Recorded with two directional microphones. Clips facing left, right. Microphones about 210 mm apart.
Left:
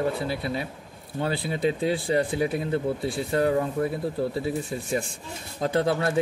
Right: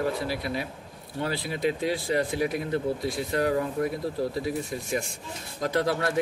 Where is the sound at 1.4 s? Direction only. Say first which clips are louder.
Left 2 dB; 30° left (ahead or behind).